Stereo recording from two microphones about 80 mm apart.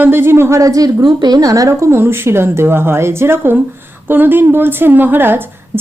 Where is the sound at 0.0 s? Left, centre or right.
Right.